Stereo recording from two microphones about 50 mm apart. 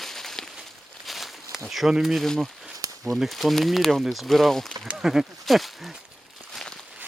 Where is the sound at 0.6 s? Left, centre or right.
Centre.